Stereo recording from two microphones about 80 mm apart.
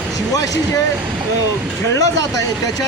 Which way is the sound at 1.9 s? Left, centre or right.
Left.